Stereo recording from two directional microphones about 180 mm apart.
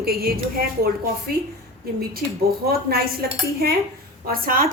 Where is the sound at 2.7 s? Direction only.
55° right (ahead or behind).